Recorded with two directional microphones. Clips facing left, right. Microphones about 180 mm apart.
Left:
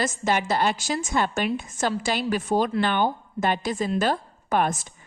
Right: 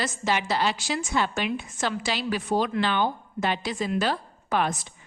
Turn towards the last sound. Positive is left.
turn(degrees=50)  # may be behind; listen again after turning